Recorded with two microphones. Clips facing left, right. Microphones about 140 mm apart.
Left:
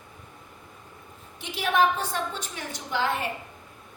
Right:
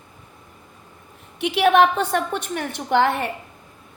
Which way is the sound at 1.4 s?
70° right (ahead or behind).